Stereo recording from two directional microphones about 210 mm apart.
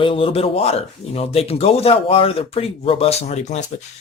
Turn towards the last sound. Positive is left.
turn(degrees=35)  # may be behind; listen again after turning